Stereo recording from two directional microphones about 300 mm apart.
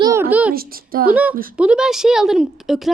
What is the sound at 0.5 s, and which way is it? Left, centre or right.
Speech, right.